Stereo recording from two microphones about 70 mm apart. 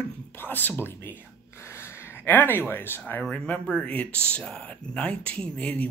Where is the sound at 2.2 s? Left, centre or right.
Left.